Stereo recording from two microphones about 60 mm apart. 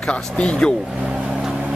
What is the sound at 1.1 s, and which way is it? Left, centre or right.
Vehicle, centre.